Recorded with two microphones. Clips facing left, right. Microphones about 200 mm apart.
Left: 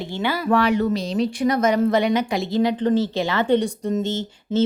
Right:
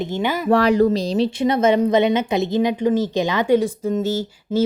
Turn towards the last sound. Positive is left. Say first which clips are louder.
# right 1 dB
turn(degrees=-10)  # may be behind; listen again after turning